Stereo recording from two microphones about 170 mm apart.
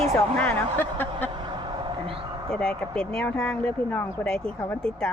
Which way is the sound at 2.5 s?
5° left (ahead or behind).